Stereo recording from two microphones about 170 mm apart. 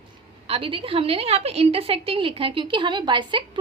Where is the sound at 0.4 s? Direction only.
30° right (ahead or behind).